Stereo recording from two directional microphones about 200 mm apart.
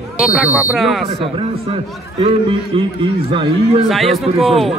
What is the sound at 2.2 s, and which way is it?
Speech, 25° right (ahead or behind).